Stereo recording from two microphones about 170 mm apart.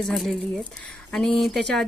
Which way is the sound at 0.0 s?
Centre (ahead or behind).